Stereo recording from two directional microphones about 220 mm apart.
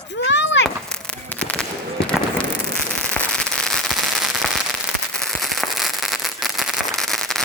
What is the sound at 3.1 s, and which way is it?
Firecracker, 5° left (ahead or behind).